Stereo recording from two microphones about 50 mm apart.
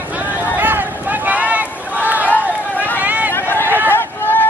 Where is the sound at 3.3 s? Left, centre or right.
Left.